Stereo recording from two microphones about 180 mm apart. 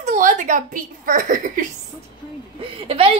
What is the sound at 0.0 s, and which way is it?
A woman's voice, 45° right (ahead or behind).